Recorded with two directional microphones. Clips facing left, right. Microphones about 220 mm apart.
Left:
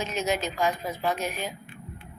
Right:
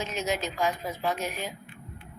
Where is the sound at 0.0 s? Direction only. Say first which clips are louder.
Left 2 dB; 55° left (ahead or behind).